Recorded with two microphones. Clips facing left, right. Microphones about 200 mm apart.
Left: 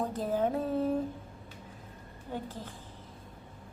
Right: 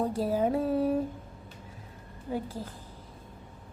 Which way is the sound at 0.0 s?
10° right (ahead or behind).